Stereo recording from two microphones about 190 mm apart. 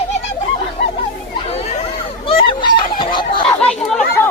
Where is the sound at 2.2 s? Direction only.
30° left (ahead or behind).